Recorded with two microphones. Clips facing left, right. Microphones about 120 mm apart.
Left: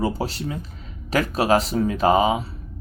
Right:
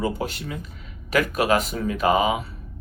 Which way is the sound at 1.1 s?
30° left (ahead or behind).